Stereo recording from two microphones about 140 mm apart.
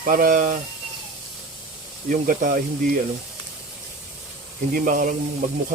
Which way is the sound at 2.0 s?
70° right (ahead or behind).